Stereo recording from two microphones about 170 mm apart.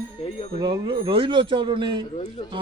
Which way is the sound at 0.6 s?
30° right (ahead or behind).